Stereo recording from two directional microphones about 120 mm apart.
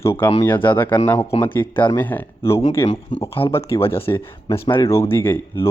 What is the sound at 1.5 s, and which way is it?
Speech, 15° left (ahead or behind).